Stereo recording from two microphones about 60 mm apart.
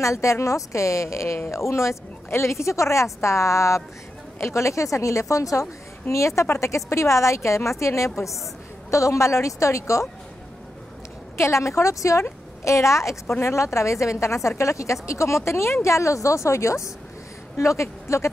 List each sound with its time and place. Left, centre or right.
0.0 s speech: left
11.3 s speech: left